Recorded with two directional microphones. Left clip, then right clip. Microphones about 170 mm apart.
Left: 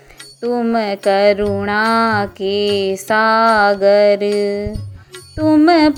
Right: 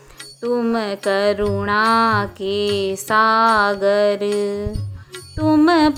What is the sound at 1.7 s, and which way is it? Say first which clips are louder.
Mantra: even; 15° left (ahead or behind).